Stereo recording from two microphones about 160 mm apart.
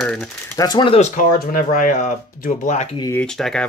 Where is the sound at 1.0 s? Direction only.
50° left (ahead or behind).